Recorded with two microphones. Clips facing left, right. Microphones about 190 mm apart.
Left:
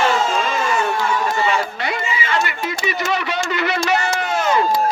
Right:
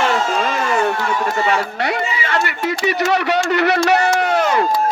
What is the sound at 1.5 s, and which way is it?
Speech, 65° right (ahead or behind).